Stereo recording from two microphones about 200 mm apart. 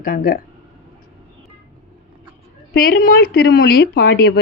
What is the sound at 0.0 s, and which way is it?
Speech, 45° left (ahead or behind).